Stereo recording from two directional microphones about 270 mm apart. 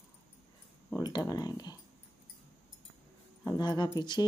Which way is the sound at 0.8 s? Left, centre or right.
Centre.